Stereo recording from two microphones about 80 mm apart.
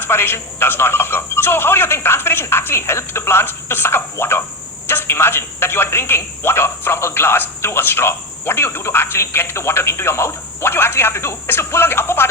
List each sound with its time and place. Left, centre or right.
0.0 s a man's voice: left